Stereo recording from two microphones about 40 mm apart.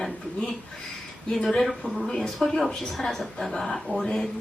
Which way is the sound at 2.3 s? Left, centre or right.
Centre.